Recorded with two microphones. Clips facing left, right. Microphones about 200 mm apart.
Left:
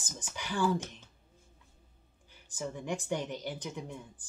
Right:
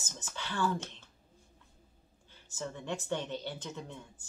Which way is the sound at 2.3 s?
15° left (ahead or behind).